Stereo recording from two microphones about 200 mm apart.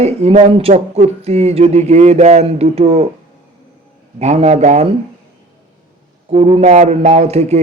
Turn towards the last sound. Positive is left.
turn(degrees=-35)  # may be behind; listen again after turning